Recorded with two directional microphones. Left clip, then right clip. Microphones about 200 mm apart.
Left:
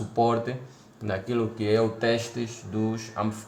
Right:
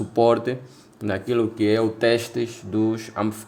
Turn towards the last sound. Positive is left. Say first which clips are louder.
# right 5 dB
turn(degrees=-45)  # may be behind; listen again after turning